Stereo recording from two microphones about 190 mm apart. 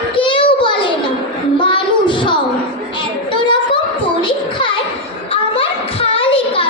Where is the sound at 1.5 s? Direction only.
25° left (ahead or behind).